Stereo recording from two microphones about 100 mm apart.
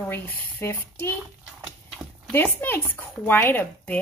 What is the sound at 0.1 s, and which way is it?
Speech, 20° left (ahead or behind).